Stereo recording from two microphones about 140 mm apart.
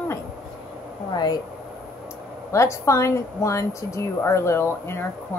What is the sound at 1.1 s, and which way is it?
Speech, 25° left (ahead or behind).